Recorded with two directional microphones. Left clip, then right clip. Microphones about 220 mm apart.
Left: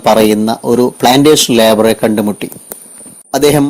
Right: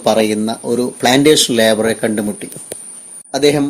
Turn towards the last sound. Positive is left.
turn(degrees=35)  # may be behind; listen again after turning